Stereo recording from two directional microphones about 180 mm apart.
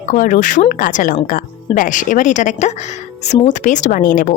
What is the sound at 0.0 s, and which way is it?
A woman's voice, 45° left (ahead or behind).